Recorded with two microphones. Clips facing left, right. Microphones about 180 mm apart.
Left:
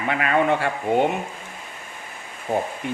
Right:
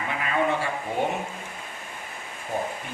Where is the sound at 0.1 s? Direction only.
70° left (ahead or behind).